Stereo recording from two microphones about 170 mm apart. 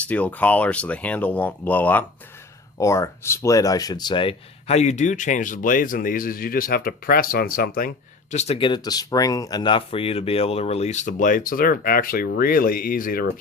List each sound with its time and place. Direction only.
0.0 s speech: 10° left (ahead or behind); by 8.4 s 60° left (ahead or behind)
8.4 s speech: 35° left (ahead or behind); by 13.2 s 60° left (ahead or behind)